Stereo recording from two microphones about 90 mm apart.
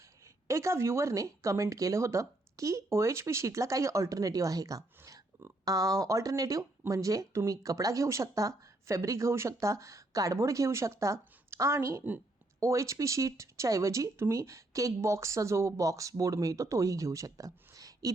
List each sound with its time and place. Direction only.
0.4 s speech: 35° right (ahead or behind)